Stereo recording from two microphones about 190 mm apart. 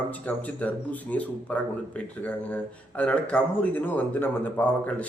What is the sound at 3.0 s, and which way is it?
Speech, 5° left (ahead or behind).